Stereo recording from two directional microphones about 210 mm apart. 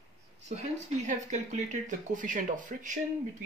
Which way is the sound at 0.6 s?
35° right (ahead or behind).